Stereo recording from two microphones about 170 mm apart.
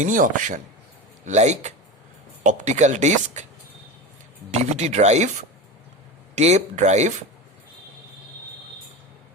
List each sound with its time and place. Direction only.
0.0 s speech: 50° right (ahead or behind)
4.7 s speech: 40° right (ahead or behind)